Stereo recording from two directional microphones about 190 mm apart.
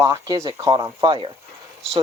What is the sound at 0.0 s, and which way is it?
Speech, 15° right (ahead or behind).